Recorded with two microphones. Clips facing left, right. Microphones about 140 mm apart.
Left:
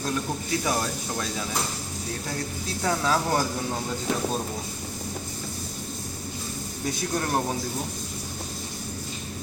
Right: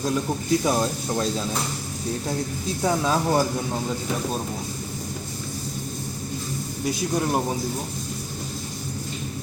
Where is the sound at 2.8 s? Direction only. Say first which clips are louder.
Right 2 dB; 15° right (ahead or behind).